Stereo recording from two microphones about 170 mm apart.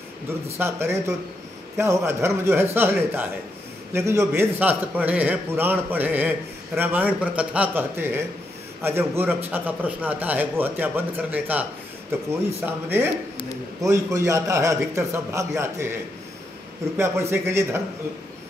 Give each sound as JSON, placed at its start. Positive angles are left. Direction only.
{"t": 0.6, "sound": "a man's voice", "side_deg": -15}
{"t": 3.9, "sound": "a man's voice", "side_deg": -15}
{"t": 12.6, "sound": "a man's voice", "side_deg": -10}